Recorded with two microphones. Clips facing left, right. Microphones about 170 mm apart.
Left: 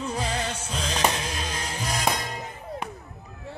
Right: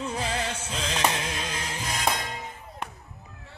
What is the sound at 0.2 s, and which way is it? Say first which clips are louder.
Music: left 1 dB; 25° right (ahead or behind).